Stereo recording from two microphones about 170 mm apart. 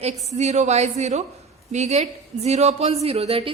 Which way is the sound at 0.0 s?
40° right (ahead or behind).